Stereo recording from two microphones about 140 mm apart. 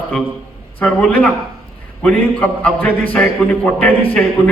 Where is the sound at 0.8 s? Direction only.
10° left (ahead or behind).